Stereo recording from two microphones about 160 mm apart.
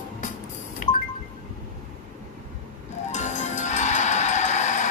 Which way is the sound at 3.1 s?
45° left (ahead or behind).